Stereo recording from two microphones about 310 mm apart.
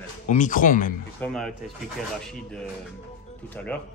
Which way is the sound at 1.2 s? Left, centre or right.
Centre.